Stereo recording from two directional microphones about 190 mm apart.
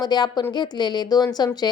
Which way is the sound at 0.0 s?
20° left (ahead or behind).